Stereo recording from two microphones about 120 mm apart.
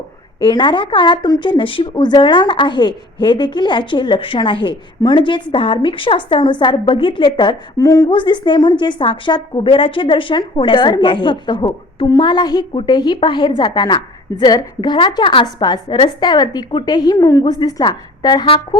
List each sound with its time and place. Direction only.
0.4 s speech: 40° left (ahead or behind)
7.8 s a woman's voice: 25° left (ahead or behind)
8.1 s a woman's voice: 45° left (ahead or behind)